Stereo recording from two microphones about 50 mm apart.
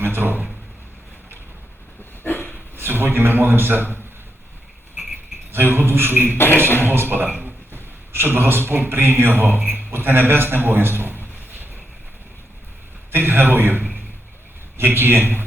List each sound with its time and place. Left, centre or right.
0.0 s a man's voice: right
2.2 s dog: left
2.7 s a man's voice: right
5.5 s a man's voice: right
6.3 s music: left
6.8 s a man's voice: right
13.1 s a man's voice: right